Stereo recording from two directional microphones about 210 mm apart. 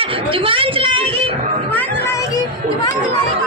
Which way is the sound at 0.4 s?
25° right (ahead or behind).